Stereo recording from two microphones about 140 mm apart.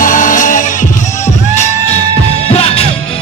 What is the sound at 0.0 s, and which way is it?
Music, 70° left (ahead or behind).